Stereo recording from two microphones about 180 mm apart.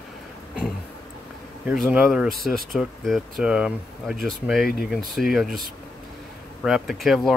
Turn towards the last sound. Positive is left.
turn(degrees=0)  # may be behind; listen again after turning